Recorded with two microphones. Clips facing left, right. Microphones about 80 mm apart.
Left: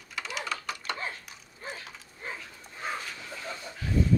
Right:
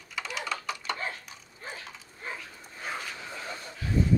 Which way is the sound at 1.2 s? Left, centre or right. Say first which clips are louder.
Left 1 dB; centre.